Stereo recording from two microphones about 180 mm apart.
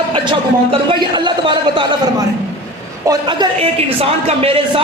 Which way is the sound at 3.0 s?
25° right (ahead or behind).